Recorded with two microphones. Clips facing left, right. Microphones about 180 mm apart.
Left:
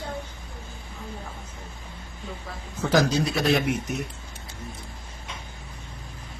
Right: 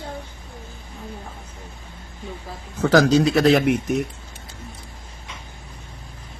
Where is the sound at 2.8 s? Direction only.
85° right.